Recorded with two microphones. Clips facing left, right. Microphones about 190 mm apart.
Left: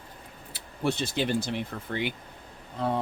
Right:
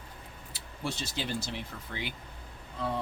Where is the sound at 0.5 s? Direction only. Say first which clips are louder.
Left 8 dB; 60° left (ahead or behind).